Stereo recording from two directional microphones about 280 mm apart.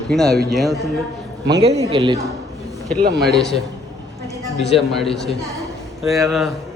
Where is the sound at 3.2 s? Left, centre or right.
Centre.